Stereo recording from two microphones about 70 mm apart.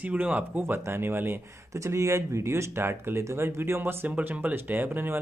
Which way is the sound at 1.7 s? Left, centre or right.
Right.